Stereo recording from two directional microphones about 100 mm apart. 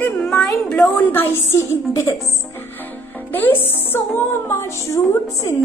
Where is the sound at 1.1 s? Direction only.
25° left (ahead or behind).